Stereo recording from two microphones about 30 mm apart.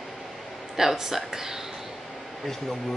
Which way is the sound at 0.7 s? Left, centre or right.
Centre.